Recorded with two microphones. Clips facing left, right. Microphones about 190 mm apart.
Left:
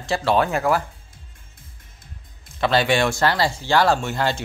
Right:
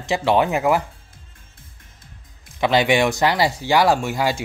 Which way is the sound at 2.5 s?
15° right (ahead or behind).